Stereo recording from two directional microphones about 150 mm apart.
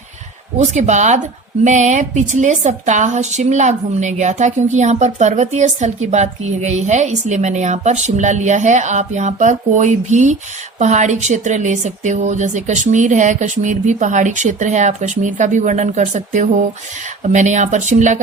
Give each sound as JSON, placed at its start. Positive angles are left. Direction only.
{"t": 0.5, "sound": "a woman's voice", "side_deg": -50}